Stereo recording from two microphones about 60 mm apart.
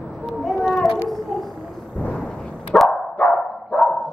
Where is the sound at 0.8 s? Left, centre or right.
Centre.